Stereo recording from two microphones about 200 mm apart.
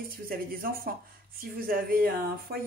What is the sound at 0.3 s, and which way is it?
Speech, 45° right (ahead or behind).